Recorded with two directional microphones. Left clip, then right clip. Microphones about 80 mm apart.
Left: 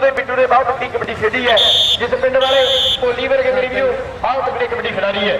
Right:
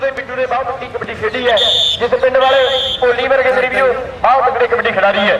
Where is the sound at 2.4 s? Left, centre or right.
Right.